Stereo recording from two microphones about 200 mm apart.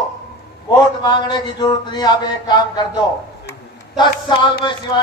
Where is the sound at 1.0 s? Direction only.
20° left (ahead or behind).